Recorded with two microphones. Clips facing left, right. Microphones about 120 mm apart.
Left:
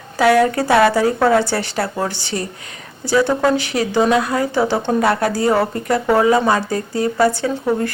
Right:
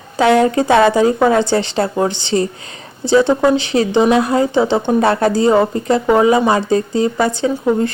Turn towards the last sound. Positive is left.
turn(degrees=-20)  # may be behind; listen again after turning